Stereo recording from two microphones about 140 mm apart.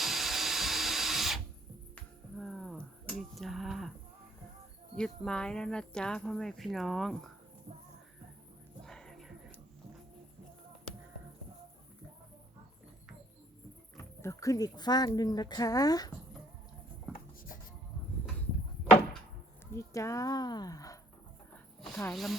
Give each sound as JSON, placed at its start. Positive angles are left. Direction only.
{"t": 0.0, "sound": "a sound", "side_deg": 0}
{"t": 2.4, "sound": "a sound", "side_deg": 5}
{"t": 4.9, "sound": "speech", "side_deg": 5}
{"t": 8.8, "sound": "music", "side_deg": 5}
{"t": 13.9, "sound": "speech", "side_deg": 20}
{"t": 19.7, "sound": "speech", "side_deg": 20}
{"t": 21.8, "sound": "snake", "side_deg": 5}
{"t": 22.1, "sound": "speech", "side_deg": 0}